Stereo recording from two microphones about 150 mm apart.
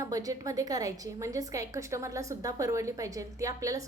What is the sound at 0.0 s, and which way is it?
A woman's voice, 25° right (ahead or behind).